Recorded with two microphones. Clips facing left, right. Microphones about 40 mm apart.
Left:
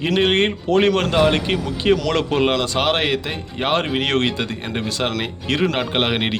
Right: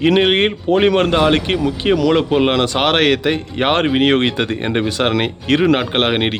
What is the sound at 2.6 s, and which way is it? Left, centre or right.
Speech, right.